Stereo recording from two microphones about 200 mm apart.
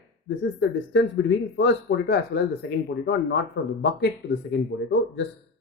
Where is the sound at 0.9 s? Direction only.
60° left (ahead or behind).